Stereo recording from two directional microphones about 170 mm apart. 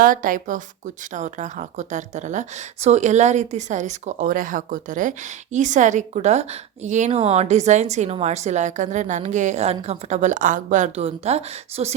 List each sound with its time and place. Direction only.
0.0 s a woman's voice: 55° right (ahead or behind)